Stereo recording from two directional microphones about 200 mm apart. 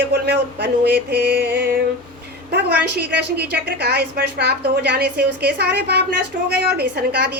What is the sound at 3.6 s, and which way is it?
A woman's voice, 55° right (ahead or behind).